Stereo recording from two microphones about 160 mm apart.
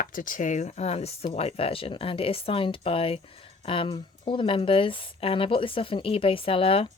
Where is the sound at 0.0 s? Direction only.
55° left (ahead or behind).